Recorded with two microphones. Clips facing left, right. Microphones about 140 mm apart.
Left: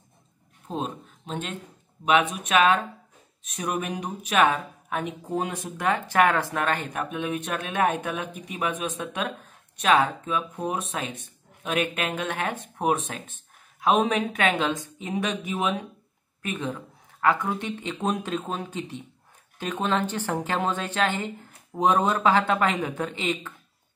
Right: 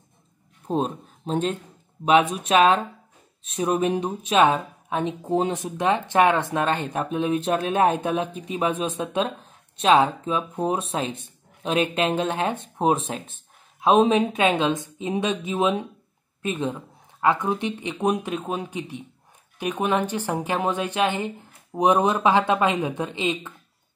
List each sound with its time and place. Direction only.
0.7 s speech: 40° right (ahead or behind); by 23.5 s 15° right (ahead or behind)